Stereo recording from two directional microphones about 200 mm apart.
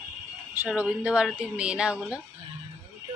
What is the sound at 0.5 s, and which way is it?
Speech, 10° right (ahead or behind).